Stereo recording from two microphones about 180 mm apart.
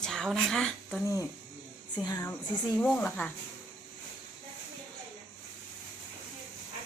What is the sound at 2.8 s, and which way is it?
Speech, 10° left (ahead or behind).